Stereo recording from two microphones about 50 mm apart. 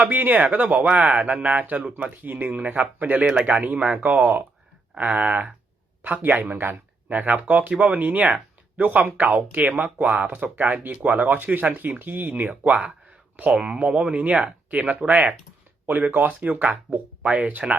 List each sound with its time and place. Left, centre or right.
0.0 s speech: right
3.2 s speech: right
3.5 s speech: right
17.2 s speech: right